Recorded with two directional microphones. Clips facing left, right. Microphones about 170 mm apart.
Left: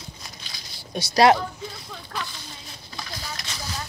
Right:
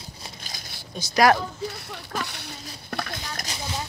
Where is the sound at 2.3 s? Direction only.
65° right (ahead or behind).